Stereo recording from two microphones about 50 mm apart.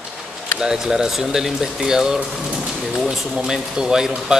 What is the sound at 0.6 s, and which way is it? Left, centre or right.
Speech, centre.